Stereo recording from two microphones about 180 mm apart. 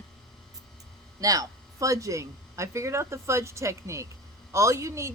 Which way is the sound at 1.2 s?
20° right (ahead or behind).